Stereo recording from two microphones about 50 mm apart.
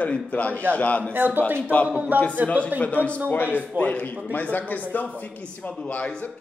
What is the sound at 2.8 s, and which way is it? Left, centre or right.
A man's voice, left.